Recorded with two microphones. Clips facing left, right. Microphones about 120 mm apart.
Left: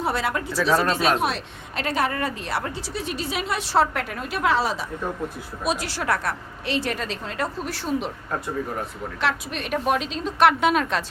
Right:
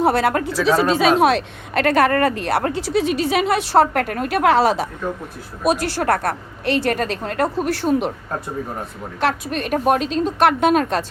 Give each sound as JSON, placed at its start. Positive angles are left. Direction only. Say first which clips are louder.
{"t": 0.0, "sound": "speech", "louder": "right 8 dB", "side_deg": -60}
{"t": 1.2, "sound": "speech", "louder": "right 10 dB", "side_deg": -80}
{"t": 5.6, "sound": "speech", "louder": "right 7 dB", "side_deg": -55}
{"t": 9.2, "sound": "a woman's voice", "louder": "right 6 dB", "side_deg": -45}